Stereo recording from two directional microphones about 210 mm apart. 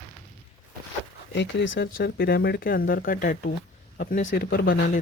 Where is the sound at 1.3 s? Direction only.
55° left (ahead or behind); by 4.3 s 40° left (ahead or behind).